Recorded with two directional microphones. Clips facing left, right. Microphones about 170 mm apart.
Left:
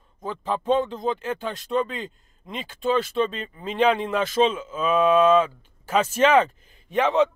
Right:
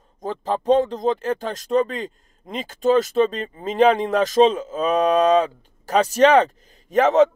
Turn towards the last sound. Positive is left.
turn(degrees=-45)  # may be behind; listen again after turning